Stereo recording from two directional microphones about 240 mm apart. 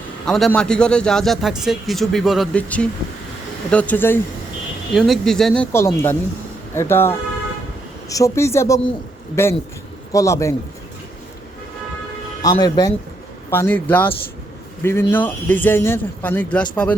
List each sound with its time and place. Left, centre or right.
0.3 s speech: centre
12.4 s speech: centre